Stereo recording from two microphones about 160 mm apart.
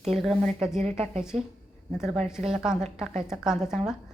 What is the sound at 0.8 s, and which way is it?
Speech, 45° right (ahead or behind).